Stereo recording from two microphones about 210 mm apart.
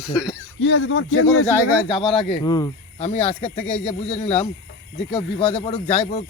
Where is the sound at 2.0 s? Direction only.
Centre (ahead or behind).